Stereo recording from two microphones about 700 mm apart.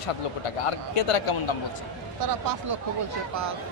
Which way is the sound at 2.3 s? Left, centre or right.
Right.